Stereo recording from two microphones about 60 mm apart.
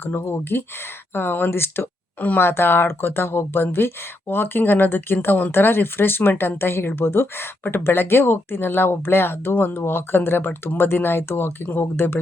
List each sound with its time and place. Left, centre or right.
0.0 s speech: left